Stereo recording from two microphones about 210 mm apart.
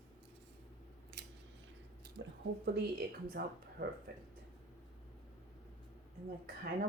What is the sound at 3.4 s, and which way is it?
Speech, 45° right (ahead or behind).